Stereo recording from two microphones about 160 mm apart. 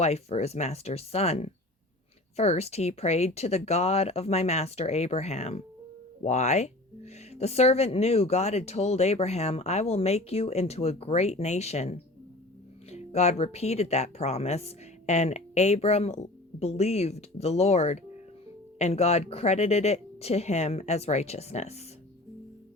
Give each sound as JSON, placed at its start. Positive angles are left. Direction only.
{"t": 0.0, "sound": "speech", "side_deg": 40}